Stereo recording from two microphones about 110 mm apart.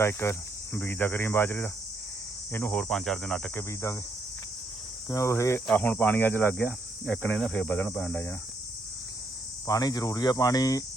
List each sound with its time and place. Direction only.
0.0 s cricket: 25° left (ahead or behind)
2.9 s cricket: 5° left (ahead or behind)
3.5 s cricket: 25° left (ahead or behind)
5.0 s cricket: 25° left (ahead or behind)
9.6 s speech: 30° left (ahead or behind)